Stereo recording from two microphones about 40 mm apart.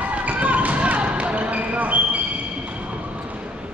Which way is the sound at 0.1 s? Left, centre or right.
Right.